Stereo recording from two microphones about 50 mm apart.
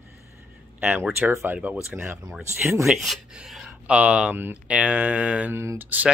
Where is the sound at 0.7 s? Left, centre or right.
Right.